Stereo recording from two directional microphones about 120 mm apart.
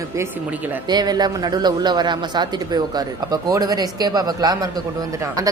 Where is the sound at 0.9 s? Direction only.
35° right (ahead or behind).